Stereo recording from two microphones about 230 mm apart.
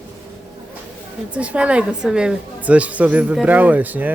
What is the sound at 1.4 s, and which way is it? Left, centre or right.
A woman's voice, centre.